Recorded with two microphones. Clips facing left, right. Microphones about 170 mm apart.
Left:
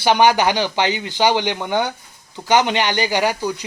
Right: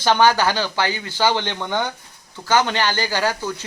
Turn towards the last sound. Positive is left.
turn(degrees=15)  # may be behind; listen again after turning